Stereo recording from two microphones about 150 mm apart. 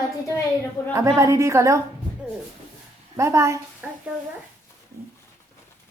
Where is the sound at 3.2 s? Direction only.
20° right (ahead or behind).